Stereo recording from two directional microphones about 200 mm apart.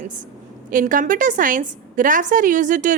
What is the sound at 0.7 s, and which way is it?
A woman's voice, 40° right (ahead or behind).